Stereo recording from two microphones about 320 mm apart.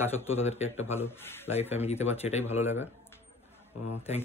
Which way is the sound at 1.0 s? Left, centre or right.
Centre.